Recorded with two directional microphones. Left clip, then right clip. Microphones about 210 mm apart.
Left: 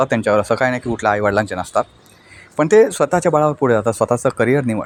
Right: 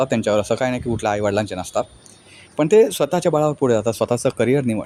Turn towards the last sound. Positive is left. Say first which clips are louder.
# left 2 dB
turn(degrees=0)  # may be behind; listen again after turning